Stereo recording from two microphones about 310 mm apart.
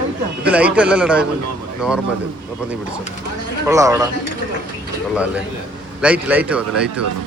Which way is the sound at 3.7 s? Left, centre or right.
Centre.